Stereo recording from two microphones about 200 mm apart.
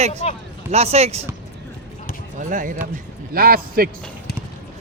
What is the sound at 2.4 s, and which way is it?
A man's voice, 40° right (ahead or behind).